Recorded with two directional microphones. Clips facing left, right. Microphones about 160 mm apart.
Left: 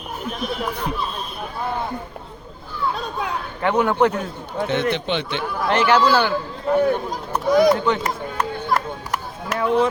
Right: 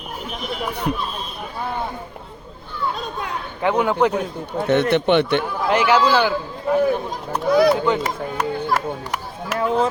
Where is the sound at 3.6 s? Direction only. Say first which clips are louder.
Even; 15° right (ahead or behind).